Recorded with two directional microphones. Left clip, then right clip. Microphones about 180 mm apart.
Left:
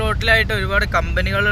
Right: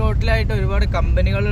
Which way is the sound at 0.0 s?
5° right (ahead or behind).